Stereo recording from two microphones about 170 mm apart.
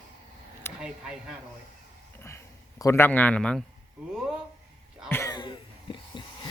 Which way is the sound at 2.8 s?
15° left (ahead or behind).